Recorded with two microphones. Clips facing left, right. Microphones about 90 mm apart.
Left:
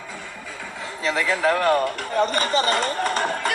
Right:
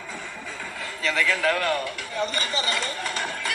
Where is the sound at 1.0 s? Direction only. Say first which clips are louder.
Left 3 dB; 25° left (ahead or behind).